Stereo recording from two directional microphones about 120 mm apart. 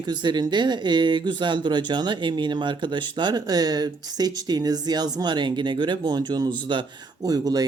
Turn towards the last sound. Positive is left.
turn(degrees=-35)  # may be behind; listen again after turning